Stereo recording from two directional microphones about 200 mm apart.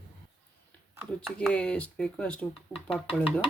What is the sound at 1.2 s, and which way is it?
Speech, 5° left (ahead or behind).